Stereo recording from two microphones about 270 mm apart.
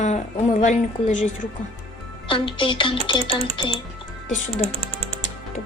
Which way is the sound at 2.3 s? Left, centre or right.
Centre.